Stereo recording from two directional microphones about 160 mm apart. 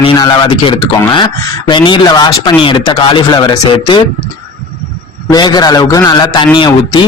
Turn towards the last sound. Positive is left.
turn(degrees=30)  # may be behind; listen again after turning